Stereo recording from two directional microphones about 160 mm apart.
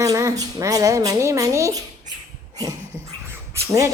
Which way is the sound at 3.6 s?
20° right (ahead or behind).